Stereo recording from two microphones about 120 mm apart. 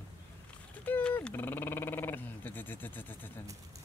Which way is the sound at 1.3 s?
15° left (ahead or behind).